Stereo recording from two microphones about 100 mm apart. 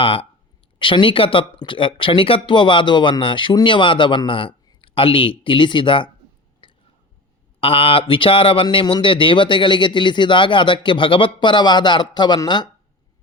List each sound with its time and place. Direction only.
0.0 s speech: 65° left (ahead or behind)
6.6 s a sound: 55° left (ahead or behind)
7.6 s speech: 65° left (ahead or behind); by 12.4 s 45° left (ahead or behind)